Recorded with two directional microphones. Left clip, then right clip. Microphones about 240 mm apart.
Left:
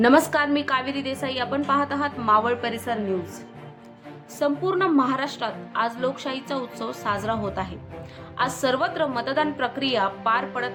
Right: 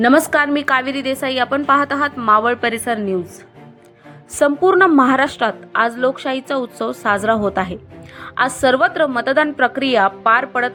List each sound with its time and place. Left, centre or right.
0.0 s a woman's voice: right
4.4 s a woman's voice: right